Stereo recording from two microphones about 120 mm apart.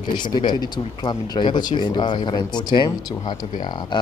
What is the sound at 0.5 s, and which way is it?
Speech, 35° left (ahead or behind).